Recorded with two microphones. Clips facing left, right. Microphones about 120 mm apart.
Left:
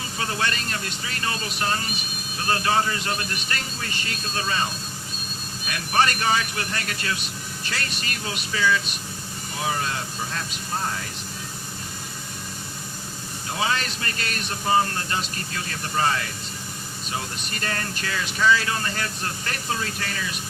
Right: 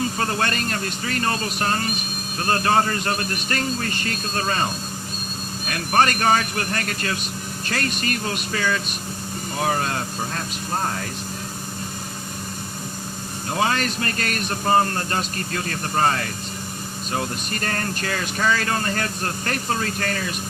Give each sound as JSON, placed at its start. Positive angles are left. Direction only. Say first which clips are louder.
{"t": 0.2, "sound": "speech", "louder": "right 4 dB", "side_deg": -45}
{"t": 13.6, "sound": "speech", "louder": "right 4 dB", "side_deg": -45}